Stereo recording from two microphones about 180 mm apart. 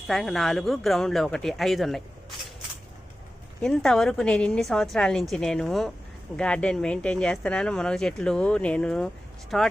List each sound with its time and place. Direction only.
0.1 s speech: centre (ahead or behind)
3.6 s speech: 5° left (ahead or behind)